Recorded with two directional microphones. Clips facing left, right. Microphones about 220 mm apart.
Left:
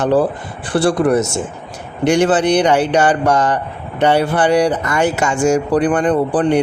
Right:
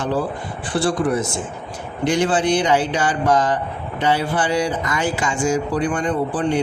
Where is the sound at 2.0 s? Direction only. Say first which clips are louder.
Left 5 dB; 70° left (ahead or behind).